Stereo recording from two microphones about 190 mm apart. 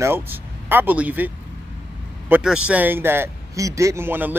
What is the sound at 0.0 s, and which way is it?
A man's voice, 10° right (ahead or behind).